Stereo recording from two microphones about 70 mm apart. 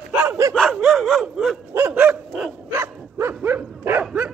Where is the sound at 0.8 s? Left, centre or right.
Centre.